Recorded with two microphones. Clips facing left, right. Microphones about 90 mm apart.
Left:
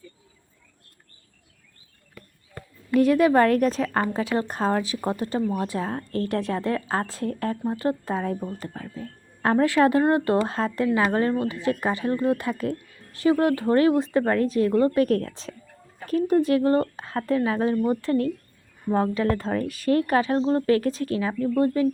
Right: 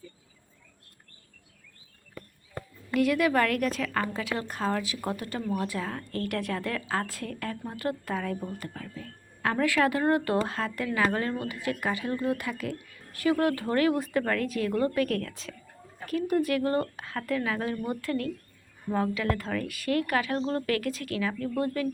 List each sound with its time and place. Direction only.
2.9 s a woman's voice: 35° left (ahead or behind)